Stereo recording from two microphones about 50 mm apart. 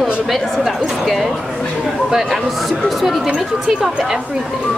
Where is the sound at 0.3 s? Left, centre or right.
Centre.